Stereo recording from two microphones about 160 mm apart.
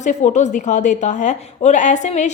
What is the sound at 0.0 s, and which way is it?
A woman's voice, 50° left (ahead or behind).